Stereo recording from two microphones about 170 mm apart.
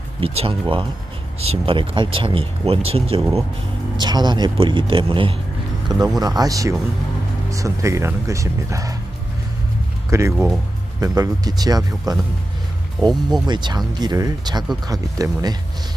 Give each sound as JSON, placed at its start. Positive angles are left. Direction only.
{"t": 0.2, "sound": "speech", "side_deg": -30}
{"t": 10.1, "sound": "speech", "side_deg": -15}